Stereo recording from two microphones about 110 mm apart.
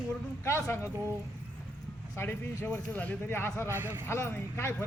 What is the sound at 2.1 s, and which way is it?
A man's voice, 20° left (ahead or behind).